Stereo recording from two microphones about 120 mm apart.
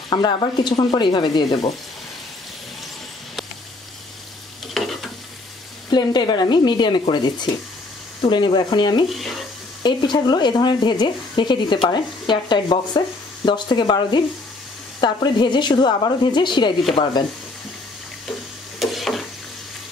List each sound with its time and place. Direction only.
0.1 s speech: 40° left (ahead or behind)
4.7 s stir: centre (ahead or behind)
5.9 s speech: 35° left (ahead or behind)
9.1 s frying: centre (ahead or behind)
9.8 s speech: 40° left (ahead or behind)
18.8 s a sound: centre (ahead or behind)